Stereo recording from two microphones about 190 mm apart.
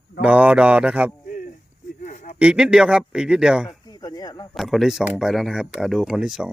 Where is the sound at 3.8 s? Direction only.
20° left (ahead or behind).